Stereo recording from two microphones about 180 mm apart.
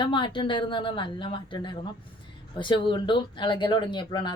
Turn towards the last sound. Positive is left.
turn(degrees=25)  # may be behind; listen again after turning